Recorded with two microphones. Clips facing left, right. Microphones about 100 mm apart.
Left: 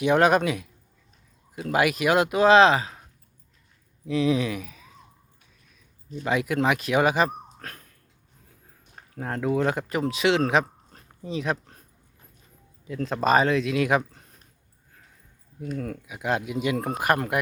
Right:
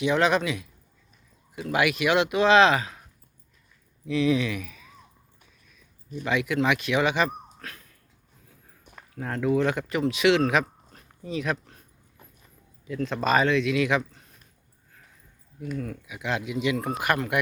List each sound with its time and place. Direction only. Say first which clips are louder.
0.0 s speech: left 3 dB; 50° left (ahead or behind)
1.5 s speech: left 1 dB; 40° left (ahead or behind)
4.0 s speech: even; 35° left (ahead or behind)
6.2 s speech: left 1 dB; 40° left (ahead or behind)
9.1 s speech: right 1 dB; 35° left (ahead or behind)
12.9 s speech: left 2 dB; 35° left (ahead or behind)
15.8 s speech: left 2 dB; 45° left (ahead or behind)